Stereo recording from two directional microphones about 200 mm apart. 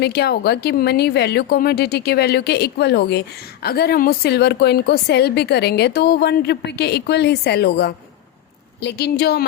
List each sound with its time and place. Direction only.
0.0 s a woman's voice: 55° left (ahead or behind)